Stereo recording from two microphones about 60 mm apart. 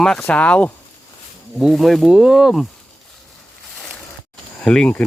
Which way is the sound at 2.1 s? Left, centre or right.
Centre.